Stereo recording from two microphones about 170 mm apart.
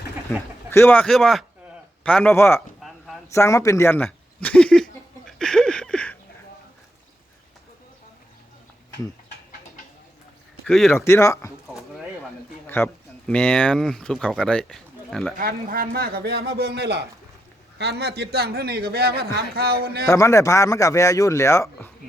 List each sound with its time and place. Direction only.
0.7 s a man's voice: 10° left (ahead or behind)
3.3 s a sound: 15° left (ahead or behind)
10.7 s a man's voice: centre (ahead or behind)
10.9 s a man's voice: 15° left (ahead or behind)
12.6 s speech: 10° left (ahead or behind)
15.4 s a man's voice: 60° right (ahead or behind)
20.1 s speech: 20° left (ahead or behind)